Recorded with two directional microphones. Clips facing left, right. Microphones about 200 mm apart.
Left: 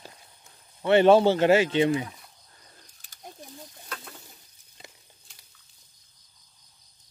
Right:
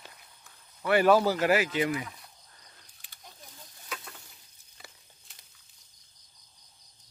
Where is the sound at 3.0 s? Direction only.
45° left (ahead or behind).